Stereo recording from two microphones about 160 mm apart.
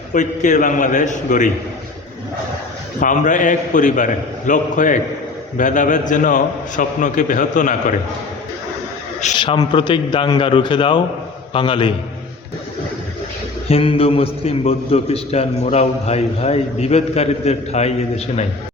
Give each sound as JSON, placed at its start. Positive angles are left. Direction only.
{"t": 0.1, "sound": "a man's voice", "side_deg": 50}
{"t": 3.0, "sound": "a man's voice", "side_deg": 55}
{"t": 9.4, "sound": "a man's voice", "side_deg": 30}
{"t": 13.7, "sound": "a man's voice", "side_deg": 35}